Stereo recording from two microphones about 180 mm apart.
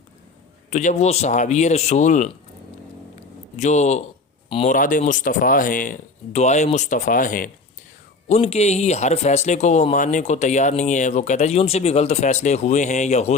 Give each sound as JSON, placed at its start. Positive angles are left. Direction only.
{"t": 0.7, "sound": "speech", "side_deg": 40}
{"t": 3.6, "sound": "speech", "side_deg": 40}
{"t": 4.7, "sound": "speech", "side_deg": 50}
{"t": 8.3, "sound": "speech", "side_deg": 35}